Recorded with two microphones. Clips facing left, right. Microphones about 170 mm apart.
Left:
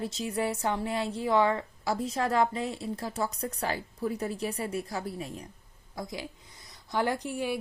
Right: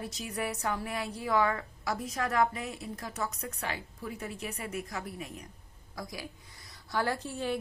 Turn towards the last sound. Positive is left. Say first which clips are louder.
# left 2 dB
turn(degrees=10)  # may be behind; listen again after turning